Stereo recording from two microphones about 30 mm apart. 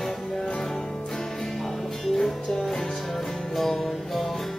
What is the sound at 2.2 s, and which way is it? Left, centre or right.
Music, centre.